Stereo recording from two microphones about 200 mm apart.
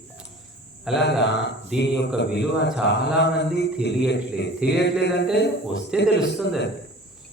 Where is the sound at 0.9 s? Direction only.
Centre (ahead or behind).